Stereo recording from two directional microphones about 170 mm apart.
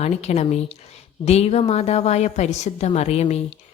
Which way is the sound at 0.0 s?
40° left (ahead or behind).